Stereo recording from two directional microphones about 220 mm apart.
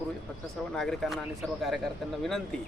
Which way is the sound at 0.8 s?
Centre (ahead or behind).